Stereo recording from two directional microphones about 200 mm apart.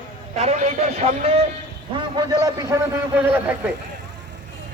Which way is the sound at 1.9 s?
25° right (ahead or behind).